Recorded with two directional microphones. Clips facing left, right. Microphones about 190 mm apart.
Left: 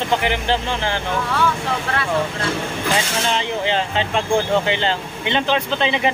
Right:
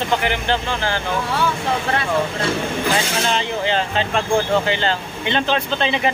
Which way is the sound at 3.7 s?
20° left (ahead or behind).